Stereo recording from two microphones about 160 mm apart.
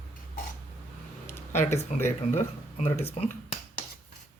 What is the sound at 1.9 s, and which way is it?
Speech, 45° left (ahead or behind).